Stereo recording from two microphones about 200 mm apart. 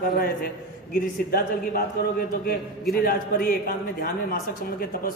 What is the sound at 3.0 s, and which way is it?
A man's voice, 50° left (ahead or behind).